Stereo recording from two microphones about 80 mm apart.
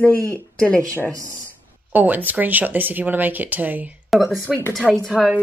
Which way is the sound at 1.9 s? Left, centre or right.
Right.